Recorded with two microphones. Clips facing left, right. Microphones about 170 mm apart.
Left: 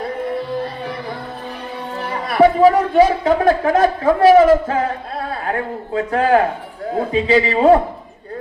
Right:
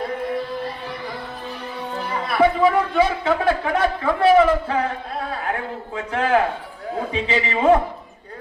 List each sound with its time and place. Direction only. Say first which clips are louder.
2.2 s a man's voice: left 6 dB; 40° left (ahead or behind)
6.1 s a man's voice: left 4 dB; 40° left (ahead or behind)